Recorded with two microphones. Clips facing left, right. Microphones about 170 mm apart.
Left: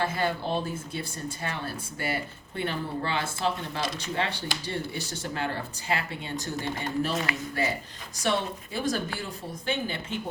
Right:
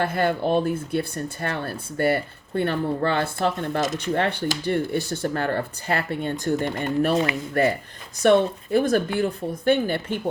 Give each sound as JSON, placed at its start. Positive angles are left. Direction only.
{"t": 0.0, "sound": "speech", "side_deg": -55}
{"t": 7.1, "sound": "speech", "side_deg": -25}
{"t": 8.2, "sound": "speech", "side_deg": -55}